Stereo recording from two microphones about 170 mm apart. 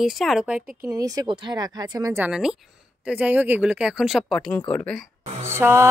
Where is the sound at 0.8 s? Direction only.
20° right (ahead or behind).